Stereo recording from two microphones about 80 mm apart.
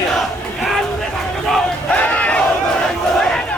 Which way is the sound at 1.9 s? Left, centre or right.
Centre.